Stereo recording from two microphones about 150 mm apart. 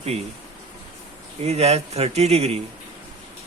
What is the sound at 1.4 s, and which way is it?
Speech, 45° right (ahead or behind).